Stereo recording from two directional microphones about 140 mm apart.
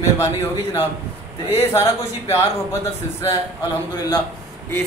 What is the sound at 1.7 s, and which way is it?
Speech, 20° left (ahead or behind).